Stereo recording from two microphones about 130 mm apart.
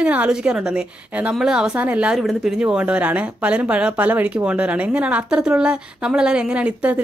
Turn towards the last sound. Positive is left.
turn(degrees=-10)  # may be behind; listen again after turning